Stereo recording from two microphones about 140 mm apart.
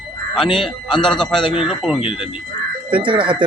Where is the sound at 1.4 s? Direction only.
35° left (ahead or behind).